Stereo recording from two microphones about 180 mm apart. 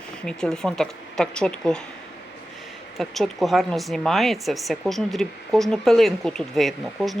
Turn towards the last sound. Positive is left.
turn(degrees=0)  # may be behind; listen again after turning